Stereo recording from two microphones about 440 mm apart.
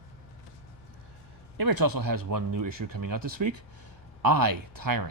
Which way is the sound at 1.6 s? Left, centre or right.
Right.